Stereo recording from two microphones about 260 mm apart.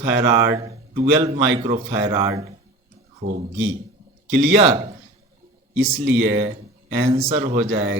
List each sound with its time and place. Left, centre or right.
0.0 s a man's voice: right